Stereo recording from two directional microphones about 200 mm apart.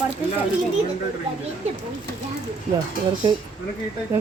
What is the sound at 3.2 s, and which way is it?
Speech, 20° right (ahead or behind).